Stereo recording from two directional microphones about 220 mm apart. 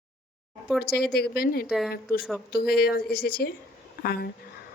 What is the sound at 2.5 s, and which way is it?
A woman's voice, 45° left (ahead or behind).